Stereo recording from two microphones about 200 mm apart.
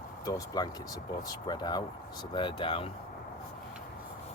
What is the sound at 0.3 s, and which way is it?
Speech, 20° left (ahead or behind).